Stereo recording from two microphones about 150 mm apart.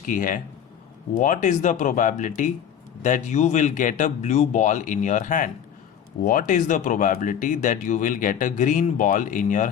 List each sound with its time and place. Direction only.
0.1 s speech: 65° left (ahead or behind)